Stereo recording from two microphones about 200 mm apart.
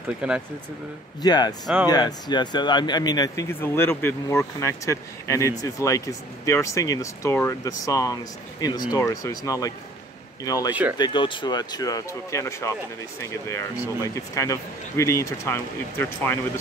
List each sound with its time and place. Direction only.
0.2 s speech: 5° right (ahead or behind)
1.2 s speech: 20° left (ahead or behind)
10.7 s speech: 5° right (ahead or behind)
11.0 s speech: 25° left (ahead or behind)